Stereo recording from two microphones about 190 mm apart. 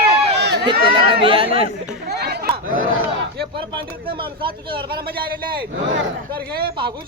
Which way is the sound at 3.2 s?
55° right (ahead or behind).